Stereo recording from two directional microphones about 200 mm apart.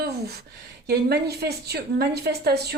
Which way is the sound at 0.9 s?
55° right (ahead or behind).